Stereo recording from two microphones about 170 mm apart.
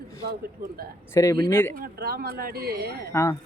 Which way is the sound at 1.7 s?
60° right (ahead or behind).